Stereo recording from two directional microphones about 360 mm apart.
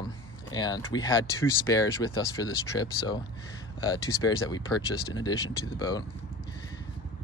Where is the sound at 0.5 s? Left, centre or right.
Centre.